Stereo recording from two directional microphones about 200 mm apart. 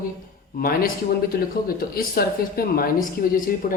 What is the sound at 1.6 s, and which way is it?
A man's voice, 45° left (ahead or behind).